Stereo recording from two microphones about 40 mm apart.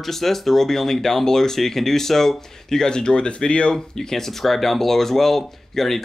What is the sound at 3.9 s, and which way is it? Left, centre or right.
Speech, centre.